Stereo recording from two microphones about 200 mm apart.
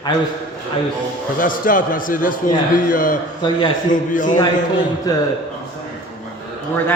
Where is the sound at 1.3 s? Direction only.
45° left (ahead or behind).